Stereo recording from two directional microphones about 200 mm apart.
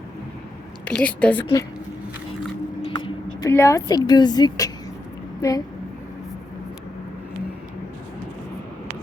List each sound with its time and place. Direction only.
0.9 s a woman's voice: 5° left (ahead or behind)
2.8 s a sound: 25° left (ahead or behind)
3.5 s a woman's voice: 15° left (ahead or behind)